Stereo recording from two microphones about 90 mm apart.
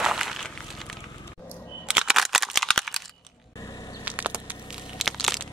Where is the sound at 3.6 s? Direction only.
45° left (ahead or behind).